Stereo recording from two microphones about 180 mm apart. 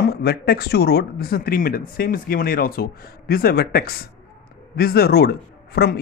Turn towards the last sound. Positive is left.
turn(degrees=60)  # may be behind; listen again after turning